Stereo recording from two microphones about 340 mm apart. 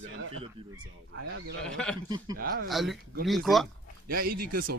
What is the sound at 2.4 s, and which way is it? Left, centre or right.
Speech, right.